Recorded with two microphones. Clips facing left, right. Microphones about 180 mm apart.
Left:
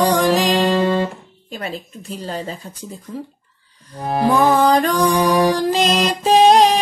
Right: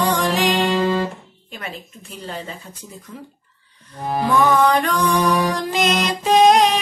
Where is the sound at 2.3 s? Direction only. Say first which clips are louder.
Left 4 dB; 40° left (ahead or behind).